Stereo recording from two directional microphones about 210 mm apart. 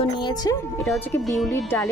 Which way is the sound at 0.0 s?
20° left (ahead or behind).